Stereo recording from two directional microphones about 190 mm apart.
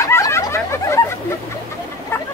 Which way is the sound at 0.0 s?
15° left (ahead or behind).